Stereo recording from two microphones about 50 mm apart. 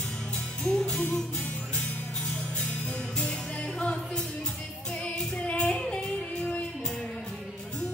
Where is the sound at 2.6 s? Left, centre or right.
Left.